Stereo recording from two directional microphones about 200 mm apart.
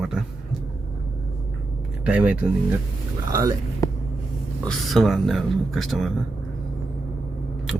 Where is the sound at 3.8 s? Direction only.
15° left (ahead or behind).